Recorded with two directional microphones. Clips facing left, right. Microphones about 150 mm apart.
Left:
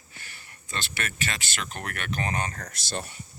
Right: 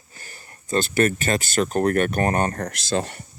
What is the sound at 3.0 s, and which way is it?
Speech, 80° right.